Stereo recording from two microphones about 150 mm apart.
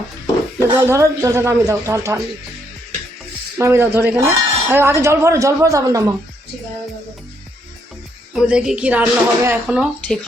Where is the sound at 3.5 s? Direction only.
15° right (ahead or behind).